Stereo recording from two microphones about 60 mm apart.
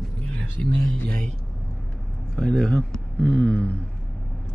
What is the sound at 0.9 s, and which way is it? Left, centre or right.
Speech, centre.